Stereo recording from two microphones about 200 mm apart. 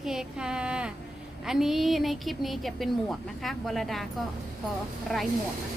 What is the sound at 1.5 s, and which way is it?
A woman's voice, centre (ahead or behind).